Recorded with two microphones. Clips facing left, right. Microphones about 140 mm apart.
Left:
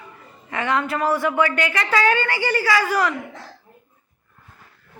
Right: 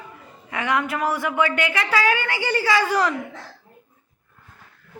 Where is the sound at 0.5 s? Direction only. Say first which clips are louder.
Left 1 dB; 10° right (ahead or behind).